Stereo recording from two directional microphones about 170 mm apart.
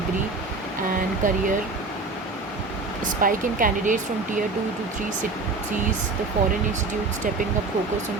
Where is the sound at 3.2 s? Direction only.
55° right (ahead or behind).